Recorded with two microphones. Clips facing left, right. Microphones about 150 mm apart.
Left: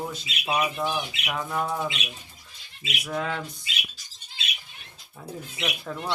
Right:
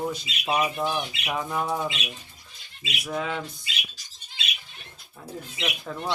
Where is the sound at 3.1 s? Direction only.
5° right (ahead or behind).